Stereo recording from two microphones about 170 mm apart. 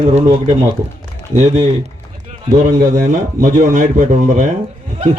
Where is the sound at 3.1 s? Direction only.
50° right (ahead or behind).